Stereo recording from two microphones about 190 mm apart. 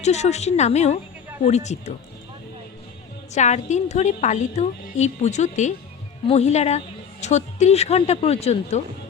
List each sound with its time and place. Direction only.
0.0 s a woman's voice: 35° left (ahead or behind)
3.3 s a woman's voice: 40° left (ahead or behind)